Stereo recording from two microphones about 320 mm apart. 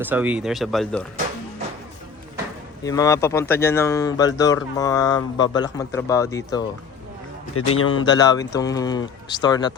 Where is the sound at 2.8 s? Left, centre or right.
Centre.